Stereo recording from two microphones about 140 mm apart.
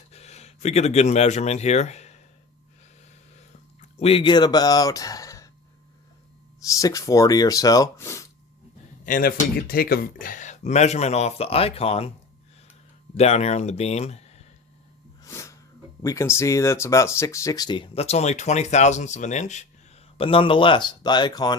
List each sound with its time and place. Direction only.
0.1 s speech: 50° left (ahead or behind)
3.8 s speech: 45° left (ahead or behind); by 5.5 s 25° left (ahead or behind)
6.8 s speech: 25° left (ahead or behind)
9.0 s speech: 80° left; by 12.1 s 45° left (ahead or behind)
13.1 s speech: 50° left (ahead or behind)
15.2 s sneeze: 20° left (ahead or behind)
16.0 s speech: 20° left (ahead or behind)
17.9 s speech: 50° left (ahead or behind)
20.1 s speech: 40° left (ahead or behind)